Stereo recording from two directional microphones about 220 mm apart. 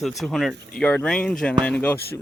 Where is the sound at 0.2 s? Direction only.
Centre (ahead or behind).